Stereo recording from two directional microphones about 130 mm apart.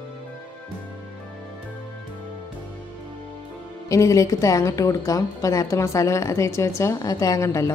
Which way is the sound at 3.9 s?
25° left (ahead or behind).